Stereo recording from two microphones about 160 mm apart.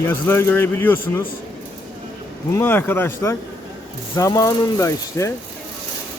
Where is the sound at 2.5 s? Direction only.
15° left (ahead or behind).